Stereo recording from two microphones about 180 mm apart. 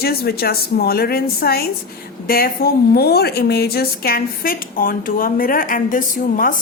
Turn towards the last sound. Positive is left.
turn(degrees=50)  # may be behind; listen again after turning